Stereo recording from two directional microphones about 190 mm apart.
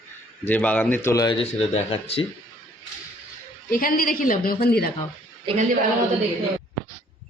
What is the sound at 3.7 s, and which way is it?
A woman's voice, 50° left (ahead or behind).